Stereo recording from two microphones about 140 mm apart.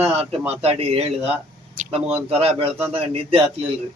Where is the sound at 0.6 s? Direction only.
45° right (ahead or behind).